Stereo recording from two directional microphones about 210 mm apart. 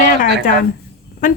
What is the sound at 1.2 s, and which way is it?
Speech, 40° left (ahead or behind).